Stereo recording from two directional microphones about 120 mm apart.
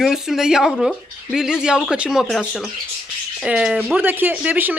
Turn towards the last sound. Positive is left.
turn(degrees=-15)  # may be behind; listen again after turning